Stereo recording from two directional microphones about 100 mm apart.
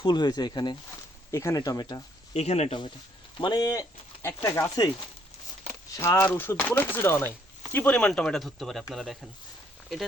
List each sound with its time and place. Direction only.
0.0 s speech: 45° left (ahead or behind)
1.3 s speech: 30° left (ahead or behind)
2.3 s speech: 90° left
3.3 s speech: 55° left (ahead or behind)
3.6 s speech: 35° left (ahead or behind)
6.0 s speech: 25° left (ahead or behind); by 9.1 s centre (ahead or behind)